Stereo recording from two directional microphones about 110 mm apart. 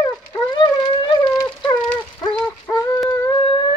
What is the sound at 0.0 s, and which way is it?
Dog, 40° left (ahead or behind).